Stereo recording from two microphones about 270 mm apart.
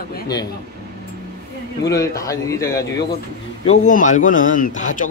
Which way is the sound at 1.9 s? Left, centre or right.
Centre.